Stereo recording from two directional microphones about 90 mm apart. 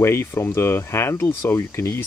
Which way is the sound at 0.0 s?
30° left (ahead or behind).